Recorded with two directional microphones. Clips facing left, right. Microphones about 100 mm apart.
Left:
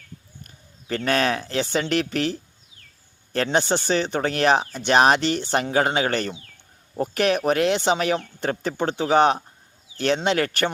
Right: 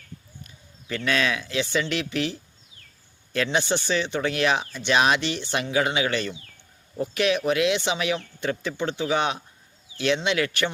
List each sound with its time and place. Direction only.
0.4 s speech: 45° left (ahead or behind)